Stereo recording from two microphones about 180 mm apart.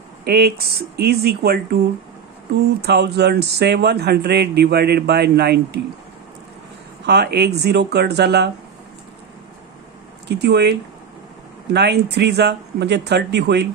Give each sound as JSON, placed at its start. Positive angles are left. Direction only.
{"t": 0.2, "sound": "speech", "side_deg": -60}
{"t": 7.1, "sound": "speech", "side_deg": -65}
{"t": 10.2, "sound": "speech", "side_deg": -70}